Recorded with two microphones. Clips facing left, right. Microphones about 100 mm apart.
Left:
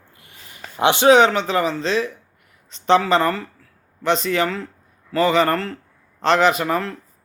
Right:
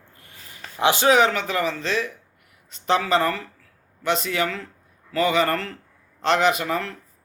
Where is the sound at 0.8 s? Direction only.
25° left (ahead or behind).